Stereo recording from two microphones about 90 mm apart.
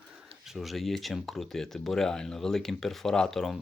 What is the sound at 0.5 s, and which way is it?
Speech, centre (ahead or behind).